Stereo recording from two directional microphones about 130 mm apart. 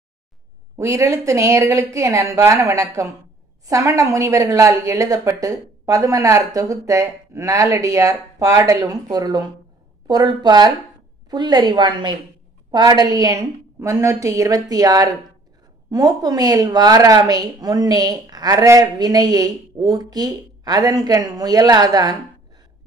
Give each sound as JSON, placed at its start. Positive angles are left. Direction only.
{"t": 0.7, "sound": "a woman's voice", "side_deg": -25}